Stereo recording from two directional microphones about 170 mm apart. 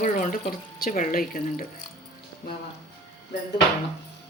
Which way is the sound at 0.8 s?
55° left (ahead or behind).